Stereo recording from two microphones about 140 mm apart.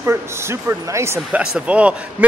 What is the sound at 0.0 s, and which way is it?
A man's voice, 20° right (ahead or behind).